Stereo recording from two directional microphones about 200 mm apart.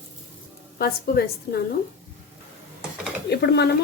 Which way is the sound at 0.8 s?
50° left (ahead or behind).